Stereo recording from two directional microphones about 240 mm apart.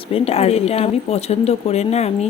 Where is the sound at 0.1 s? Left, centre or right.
Left.